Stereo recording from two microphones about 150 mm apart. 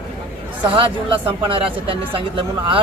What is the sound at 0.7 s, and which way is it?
Speech, 35° right (ahead or behind).